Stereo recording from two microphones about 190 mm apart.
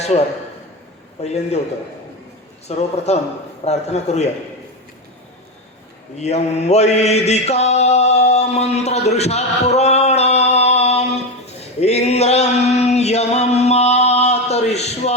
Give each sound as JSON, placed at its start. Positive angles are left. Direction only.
{"t": 1.2, "sound": "a man's voice", "side_deg": 35}
{"t": 2.7, "sound": "a man's voice", "side_deg": 35}
{"t": 6.1, "sound": "mantra", "side_deg": 35}